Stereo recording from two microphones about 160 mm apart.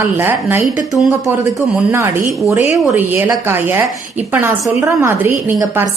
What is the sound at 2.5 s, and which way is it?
A woman's voice, 15° right (ahead or behind).